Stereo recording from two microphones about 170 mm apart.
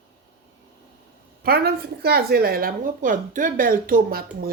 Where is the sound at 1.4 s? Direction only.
65° right (ahead or behind).